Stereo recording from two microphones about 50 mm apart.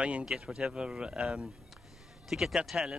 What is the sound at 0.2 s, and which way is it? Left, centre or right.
Speech, centre.